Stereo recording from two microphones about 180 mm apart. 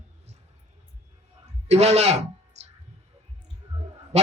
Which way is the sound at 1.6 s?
35° right (ahead or behind).